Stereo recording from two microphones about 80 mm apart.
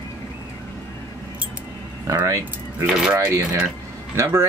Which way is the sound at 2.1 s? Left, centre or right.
Right.